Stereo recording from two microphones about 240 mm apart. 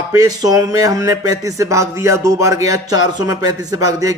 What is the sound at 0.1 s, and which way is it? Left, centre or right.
Speech, centre.